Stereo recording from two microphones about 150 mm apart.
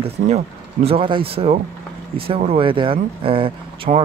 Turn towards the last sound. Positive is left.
turn(degrees=-35)  # may be behind; listen again after turning